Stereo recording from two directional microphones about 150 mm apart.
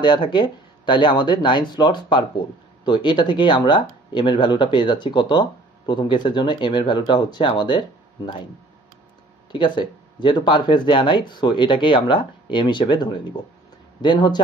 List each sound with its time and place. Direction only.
0.0 s speech: 30° left (ahead or behind)
9.5 s a man's voice: 30° left (ahead or behind)